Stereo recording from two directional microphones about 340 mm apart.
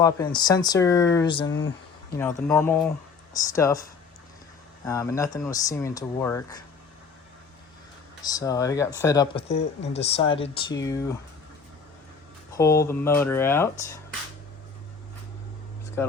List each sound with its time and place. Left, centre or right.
0.0 s speech: centre
1.5 s a sound: left
2.1 s speech: centre
4.9 s speech: centre
8.2 s speech: centre
12.5 s speech: centre
16.0 s speech: centre